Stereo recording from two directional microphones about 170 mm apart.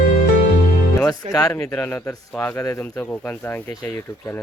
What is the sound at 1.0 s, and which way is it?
Speech, 20° left (ahead or behind).